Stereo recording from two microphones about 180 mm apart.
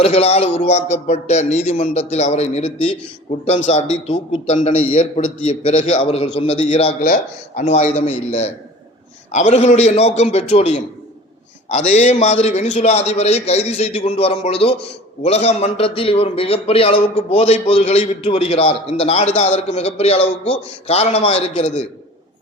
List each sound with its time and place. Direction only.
0.0 s a man's voice: 35° left (ahead or behind)